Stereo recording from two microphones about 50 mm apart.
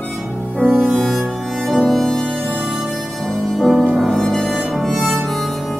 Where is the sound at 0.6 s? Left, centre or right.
Left.